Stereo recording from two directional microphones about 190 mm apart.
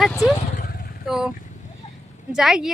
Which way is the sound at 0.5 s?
45° left (ahead or behind).